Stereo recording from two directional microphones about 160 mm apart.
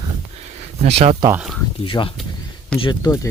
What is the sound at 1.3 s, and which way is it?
Speech, 5° right (ahead or behind).